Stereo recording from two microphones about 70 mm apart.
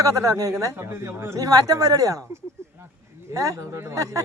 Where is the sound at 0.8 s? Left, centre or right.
Right.